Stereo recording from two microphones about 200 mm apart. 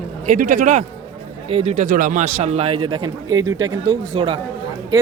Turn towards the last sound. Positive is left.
turn(degrees=-25)  # may be behind; listen again after turning